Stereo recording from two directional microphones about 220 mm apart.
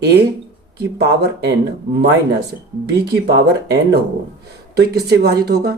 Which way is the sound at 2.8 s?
45° right (ahead or behind).